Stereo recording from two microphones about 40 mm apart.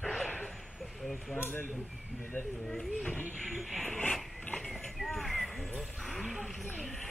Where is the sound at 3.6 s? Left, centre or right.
Centre.